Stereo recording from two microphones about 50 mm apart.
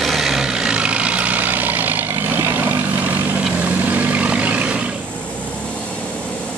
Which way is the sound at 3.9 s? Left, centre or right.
Right.